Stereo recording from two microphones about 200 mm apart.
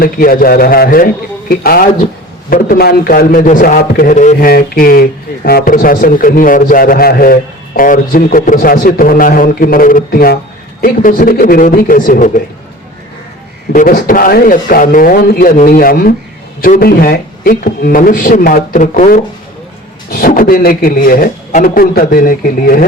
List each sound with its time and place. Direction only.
0.0 s a man's voice: 45° left (ahead or behind)
13.7 s a man's voice: 45° left (ahead or behind)